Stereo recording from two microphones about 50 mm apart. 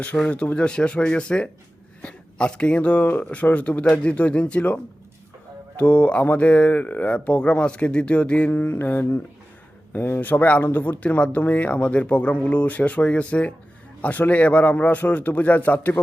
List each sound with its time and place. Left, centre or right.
0.3 s a man's voice: left
8.5 s a man's voice: left